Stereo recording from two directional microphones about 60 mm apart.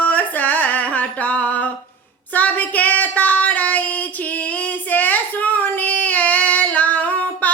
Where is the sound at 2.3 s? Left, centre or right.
Left.